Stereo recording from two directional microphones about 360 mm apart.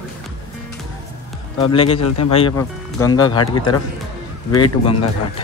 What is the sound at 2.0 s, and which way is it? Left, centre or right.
Speech, left.